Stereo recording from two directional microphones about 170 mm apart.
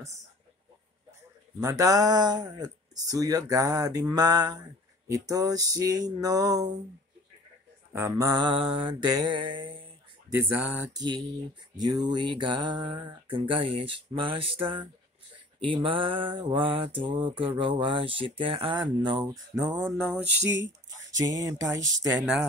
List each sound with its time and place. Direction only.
1.6 s speech: 20° right (ahead or behind)
7.9 s speech: 15° right (ahead or behind)
10.3 s speech: 10° right (ahead or behind)
11.0 s speech: 25° right (ahead or behind)
15.6 s mantra: 30° right (ahead or behind)
17.6 s speech: 30° right (ahead or behind)
20.6 s a sound: 90° right
21.5 s speech: 20° right (ahead or behind)
22.1 s speech: 5° right (ahead or behind)